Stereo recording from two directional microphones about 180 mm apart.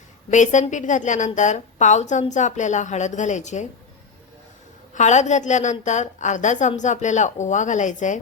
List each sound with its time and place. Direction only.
0.3 s a woman's voice: 40° left (ahead or behind)
4.9 s a woman's voice: 40° left (ahead or behind)